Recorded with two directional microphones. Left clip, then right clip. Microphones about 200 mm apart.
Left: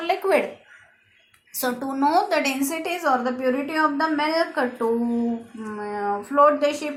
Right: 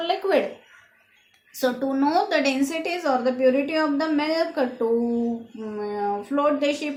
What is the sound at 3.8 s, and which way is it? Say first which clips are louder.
Speech: left 2 dB; 20° left (ahead or behind).